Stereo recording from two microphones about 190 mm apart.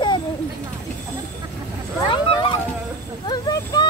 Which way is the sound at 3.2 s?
20° left (ahead or behind).